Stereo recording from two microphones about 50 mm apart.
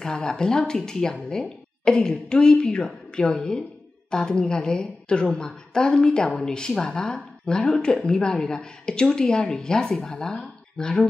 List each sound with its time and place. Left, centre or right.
0.0 s a woman's voice: centre